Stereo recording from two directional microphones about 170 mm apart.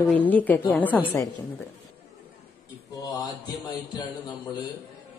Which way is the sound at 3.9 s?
25° left (ahead or behind).